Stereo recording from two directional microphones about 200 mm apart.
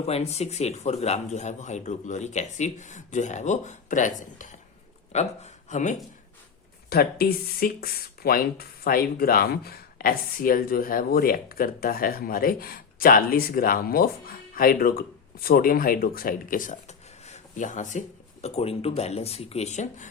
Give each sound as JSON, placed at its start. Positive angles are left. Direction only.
{"t": 0.0, "sound": "speech", "side_deg": 30}
{"t": 6.9, "sound": "speech", "side_deg": 50}